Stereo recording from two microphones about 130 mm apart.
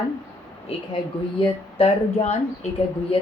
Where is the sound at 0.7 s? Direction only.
50° left (ahead or behind).